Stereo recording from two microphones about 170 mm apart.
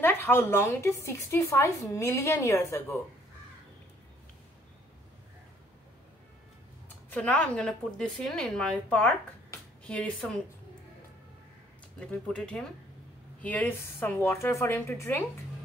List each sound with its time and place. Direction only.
0.0 s speech: 10° left (ahead or behind)
7.1 s speech: 5° left (ahead or behind)
12.0 s speech: 5° left (ahead or behind)